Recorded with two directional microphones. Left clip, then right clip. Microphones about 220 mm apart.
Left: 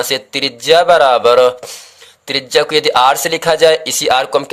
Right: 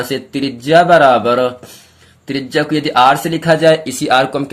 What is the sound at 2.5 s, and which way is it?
Speech, 45° left (ahead or behind).